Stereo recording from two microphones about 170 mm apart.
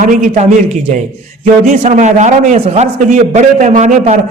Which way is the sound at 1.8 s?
45° right (ahead or behind).